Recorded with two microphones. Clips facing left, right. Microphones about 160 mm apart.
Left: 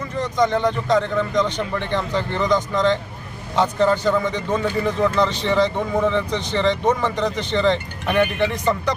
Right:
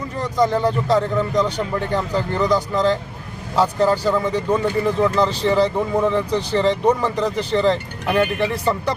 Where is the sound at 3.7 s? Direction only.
35° right (ahead or behind).